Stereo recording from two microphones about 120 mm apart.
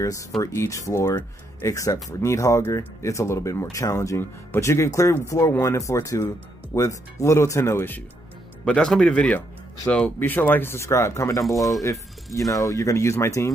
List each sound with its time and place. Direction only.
0.0 s speech: 25° left (ahead or behind)
8.6 s speech: 5° left (ahead or behind); by 13.5 s 25° left (ahead or behind)